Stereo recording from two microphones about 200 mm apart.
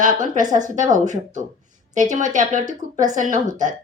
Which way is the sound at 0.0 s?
40° right (ahead or behind).